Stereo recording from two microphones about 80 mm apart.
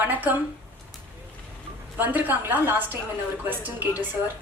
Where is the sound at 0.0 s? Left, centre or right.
Right.